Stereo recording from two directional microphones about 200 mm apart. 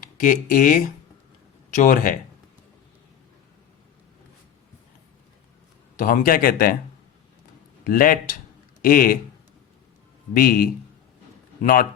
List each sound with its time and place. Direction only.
0.2 s speech: 45° left (ahead or behind)
6.0 s speech: 45° left (ahead or behind)
7.9 s speech: 45° left (ahead or behind)
10.3 s speech: 45° left (ahead or behind)